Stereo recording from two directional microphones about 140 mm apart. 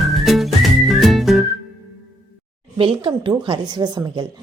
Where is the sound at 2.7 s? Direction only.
40° right (ahead or behind).